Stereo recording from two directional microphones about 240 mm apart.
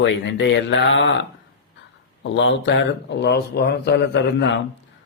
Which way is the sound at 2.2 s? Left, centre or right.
Left.